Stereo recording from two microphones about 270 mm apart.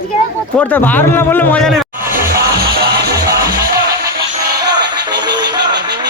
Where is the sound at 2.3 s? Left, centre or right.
Right.